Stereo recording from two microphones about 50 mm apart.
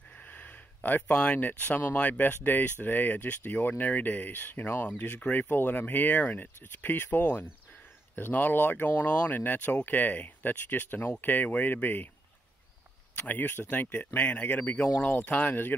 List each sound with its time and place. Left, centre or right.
0.2 s a sound: left
1.0 s speech: left
13.2 s speech: left